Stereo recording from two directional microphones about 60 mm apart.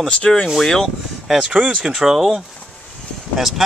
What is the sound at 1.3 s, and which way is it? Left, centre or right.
Speech, centre.